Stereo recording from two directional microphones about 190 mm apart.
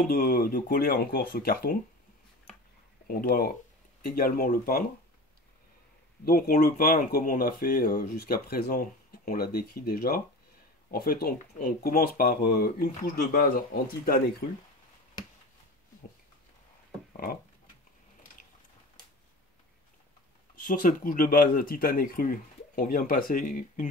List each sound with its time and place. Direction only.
0.1 s speech: 50° left (ahead or behind)
3.1 s speech: 50° left (ahead or behind)
6.2 s speech: 50° left (ahead or behind)
20.6 s speech: 45° left (ahead or behind)